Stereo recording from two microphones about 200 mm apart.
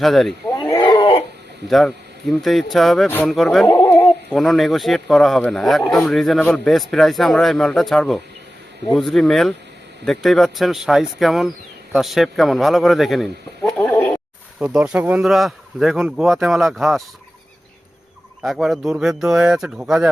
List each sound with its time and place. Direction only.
0.0 s speech: centre (ahead or behind)
0.6 s wild animals: 20° left (ahead or behind)
1.7 s speech: centre (ahead or behind)
14.6 s speech: 5° right (ahead or behind)
18.4 s speech: centre (ahead or behind)